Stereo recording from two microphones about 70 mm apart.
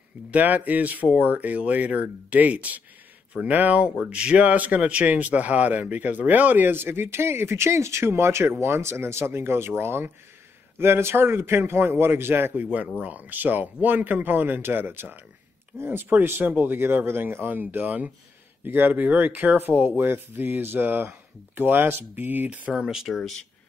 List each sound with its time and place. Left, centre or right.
0.3 s a man's voice: right
13.0 s speech: right
22.7 s speech: centre
23.1 s speech: centre